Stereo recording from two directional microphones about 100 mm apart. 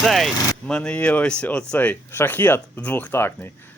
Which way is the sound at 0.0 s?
Centre (ahead or behind).